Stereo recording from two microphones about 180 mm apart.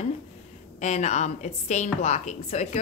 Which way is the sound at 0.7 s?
40° left (ahead or behind).